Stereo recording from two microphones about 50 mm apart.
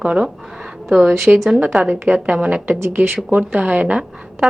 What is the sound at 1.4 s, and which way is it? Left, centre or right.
A woman's voice, right.